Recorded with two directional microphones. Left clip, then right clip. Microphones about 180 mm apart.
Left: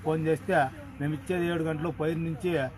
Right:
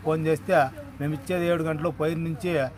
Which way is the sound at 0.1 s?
20° right (ahead or behind).